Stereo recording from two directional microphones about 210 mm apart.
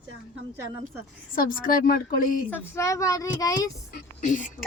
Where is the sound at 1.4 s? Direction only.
40° left (ahead or behind).